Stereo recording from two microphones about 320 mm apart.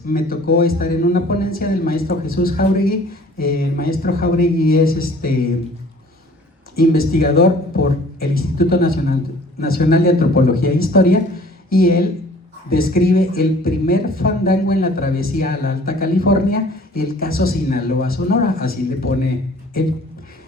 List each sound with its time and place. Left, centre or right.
0.1 s speech: left
6.7 s speech: left